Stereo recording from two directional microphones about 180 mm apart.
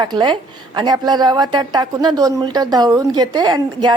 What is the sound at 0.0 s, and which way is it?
A woman's voice, 25° right (ahead or behind).